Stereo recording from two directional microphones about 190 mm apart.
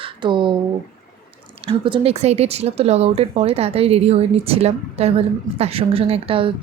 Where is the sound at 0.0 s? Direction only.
25° right (ahead or behind).